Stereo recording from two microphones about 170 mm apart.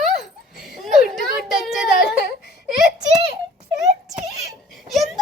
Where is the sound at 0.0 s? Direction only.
Centre (ahead or behind).